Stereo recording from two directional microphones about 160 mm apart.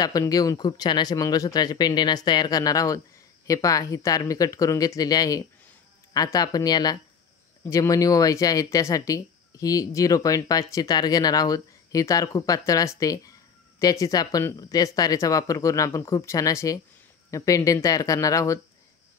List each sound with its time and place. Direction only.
0.0 s speech: 20° left (ahead or behind)